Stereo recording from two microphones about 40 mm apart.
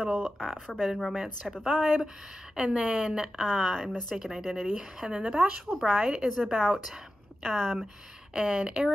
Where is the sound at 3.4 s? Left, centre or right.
Centre.